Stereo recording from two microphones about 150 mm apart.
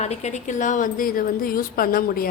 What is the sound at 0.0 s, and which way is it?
A woman's voice, 50° left (ahead or behind).